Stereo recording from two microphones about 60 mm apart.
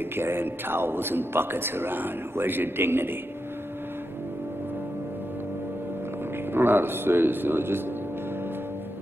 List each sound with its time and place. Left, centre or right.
0.1 s a man's voice: right
6.5 s a man's voice: right